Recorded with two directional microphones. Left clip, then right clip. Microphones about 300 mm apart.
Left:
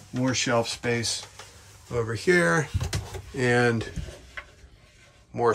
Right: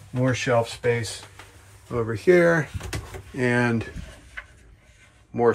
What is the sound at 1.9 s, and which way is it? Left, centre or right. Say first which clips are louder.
Speech: right 4 dB; centre.